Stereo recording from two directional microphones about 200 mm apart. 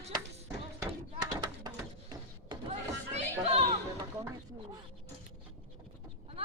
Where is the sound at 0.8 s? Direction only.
20° right (ahead or behind).